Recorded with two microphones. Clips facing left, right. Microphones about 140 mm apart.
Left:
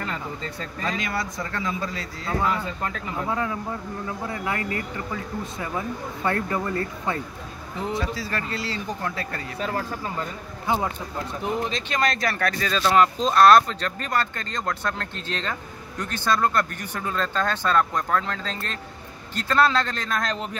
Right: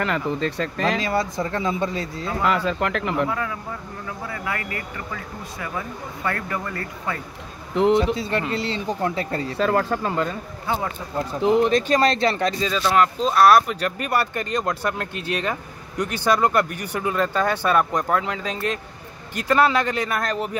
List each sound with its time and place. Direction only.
0.0 s speech: 80° right
0.9 s speech: 30° right (ahead or behind)
2.4 s speech: 90° right
3.3 s speech: 25° left (ahead or behind)
7.7 s a man's voice: 80° right
8.0 s speech: 25° right (ahead or behind)
9.6 s speech: 80° right
10.7 s speech: 15° left (ahead or behind)
11.4 s speech: 90° right
11.9 s speech: 30° right (ahead or behind)
12.8 s speech: centre (ahead or behind)